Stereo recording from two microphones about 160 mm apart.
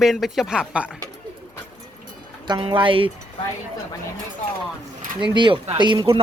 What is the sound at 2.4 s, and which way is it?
Speech, 30° right (ahead or behind).